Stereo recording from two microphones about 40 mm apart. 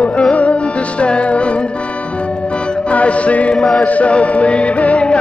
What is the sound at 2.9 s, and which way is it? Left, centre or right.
Music, left.